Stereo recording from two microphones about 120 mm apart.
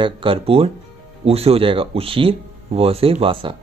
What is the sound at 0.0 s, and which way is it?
Speech, 45° right (ahead or behind).